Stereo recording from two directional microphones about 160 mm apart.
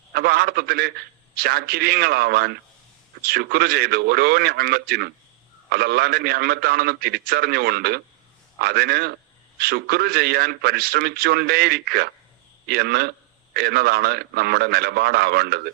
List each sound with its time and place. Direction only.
0.1 s a man's voice: 75° right (ahead or behind)